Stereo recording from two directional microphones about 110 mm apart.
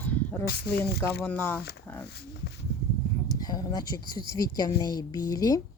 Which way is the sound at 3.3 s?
35° left (ahead or behind).